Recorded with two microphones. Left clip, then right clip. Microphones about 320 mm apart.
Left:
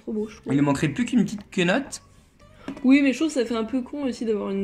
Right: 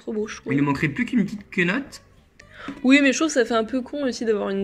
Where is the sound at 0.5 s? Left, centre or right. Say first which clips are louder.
Left 1 dB; centre.